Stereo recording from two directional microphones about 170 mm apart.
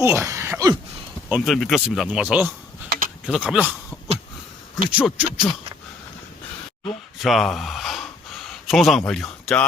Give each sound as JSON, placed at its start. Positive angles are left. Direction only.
{"t": 0.0, "sound": "speech", "side_deg": -15}
{"t": 1.3, "sound": "speech", "side_deg": 0}
{"t": 4.9, "sound": "speech", "side_deg": -10}
{"t": 7.2, "sound": "a sound", "side_deg": 0}